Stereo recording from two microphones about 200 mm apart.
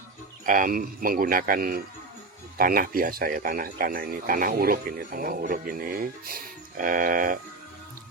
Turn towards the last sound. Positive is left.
turn(degrees=-45)  # may be behind; listen again after turning